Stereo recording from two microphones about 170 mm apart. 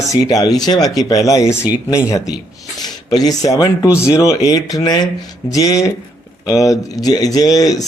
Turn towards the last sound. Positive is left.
turn(degrees=20)  # may be behind; listen again after turning